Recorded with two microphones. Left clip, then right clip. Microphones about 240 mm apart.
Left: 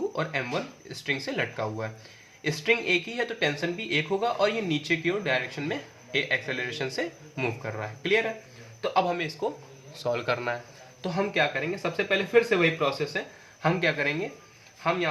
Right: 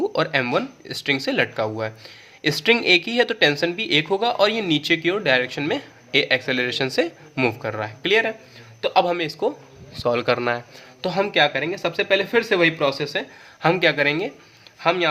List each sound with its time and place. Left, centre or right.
0.1 s speech: right
11.0 s speech: right